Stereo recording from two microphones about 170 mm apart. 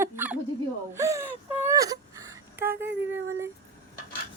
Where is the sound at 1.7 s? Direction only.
20° right (ahead or behind).